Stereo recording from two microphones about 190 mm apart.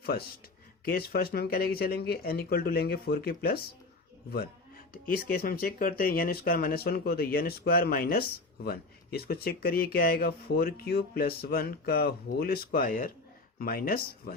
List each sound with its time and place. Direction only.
0.0 s speech: 55° left (ahead or behind)
5.1 s speech: 50° left (ahead or behind)